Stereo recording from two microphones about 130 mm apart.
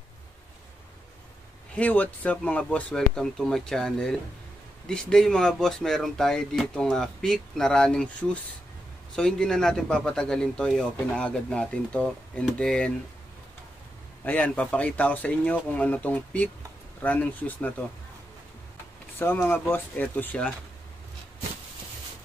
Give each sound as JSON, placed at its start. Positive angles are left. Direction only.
{"t": 1.8, "sound": "speech", "side_deg": 10}
{"t": 14.2, "sound": "speech", "side_deg": 10}
{"t": 19.1, "sound": "speech", "side_deg": 15}